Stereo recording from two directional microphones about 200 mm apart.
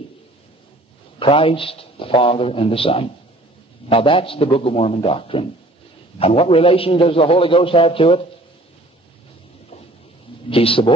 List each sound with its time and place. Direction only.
1.2 s a man's voice: 25° left (ahead or behind)
10.5 s a man's voice: 25° left (ahead or behind)